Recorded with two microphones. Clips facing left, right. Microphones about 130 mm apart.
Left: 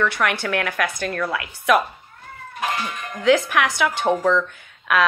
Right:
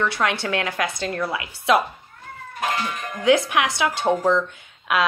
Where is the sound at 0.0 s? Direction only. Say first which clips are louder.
Left 1 dB; 20° right (ahead or behind).